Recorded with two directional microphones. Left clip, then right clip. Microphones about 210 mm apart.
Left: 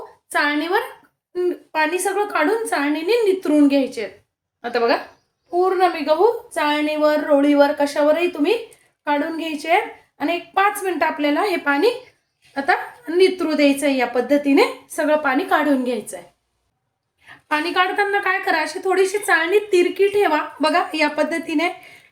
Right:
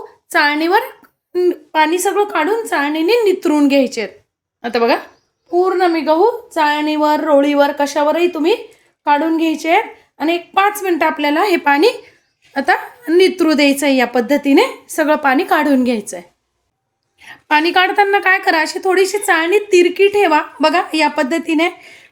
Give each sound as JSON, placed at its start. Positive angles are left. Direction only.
{"t": 0.3, "sound": "a woman's voice", "side_deg": -45}
{"t": 5.5, "sound": "a woman's voice", "side_deg": -40}